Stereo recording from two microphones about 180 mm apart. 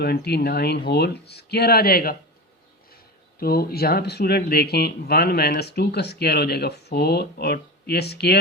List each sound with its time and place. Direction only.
0.0 s speech: 65° left (ahead or behind)
3.4 s speech: 55° left (ahead or behind)